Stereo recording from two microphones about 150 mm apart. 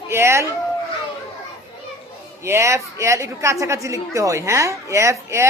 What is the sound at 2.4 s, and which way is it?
A woman's voice, 20° right (ahead or behind).